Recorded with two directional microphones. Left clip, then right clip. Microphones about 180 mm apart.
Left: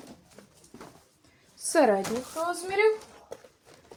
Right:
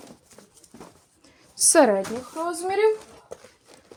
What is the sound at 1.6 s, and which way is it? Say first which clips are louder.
Speech: right 5 dB; 60° right (ahead or behind).